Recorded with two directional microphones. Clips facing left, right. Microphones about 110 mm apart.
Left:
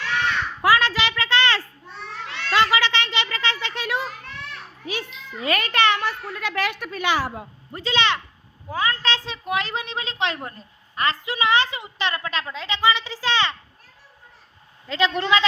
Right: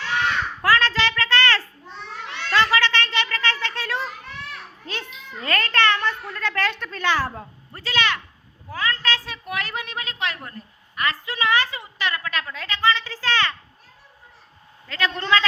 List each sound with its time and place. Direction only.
0.6 s a sound: 15° left (ahead or behind)
4.9 s a child's voice: 10° left (ahead or behind)
14.8 s a woman's voice: 20° left (ahead or behind)